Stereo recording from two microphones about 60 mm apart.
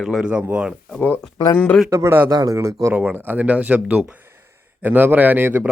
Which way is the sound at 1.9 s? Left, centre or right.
Right.